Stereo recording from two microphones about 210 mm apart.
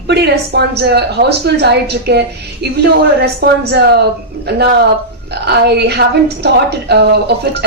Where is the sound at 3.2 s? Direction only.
45° right (ahead or behind).